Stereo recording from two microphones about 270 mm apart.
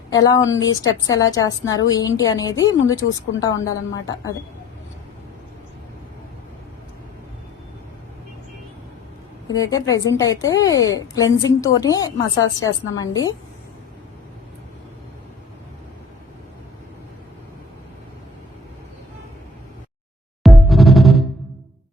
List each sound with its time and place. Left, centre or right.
0.1 s a woman's voice: centre
2.8 s speech: left
3.4 s a woman's voice: centre
9.5 s a woman's voice: centre
20.4 s music: centre